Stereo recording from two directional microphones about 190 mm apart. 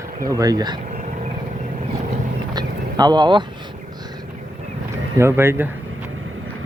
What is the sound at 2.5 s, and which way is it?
Vehicle, 20° right (ahead or behind).